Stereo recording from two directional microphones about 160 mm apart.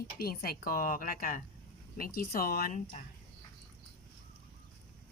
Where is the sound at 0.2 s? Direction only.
70° left (ahead or behind).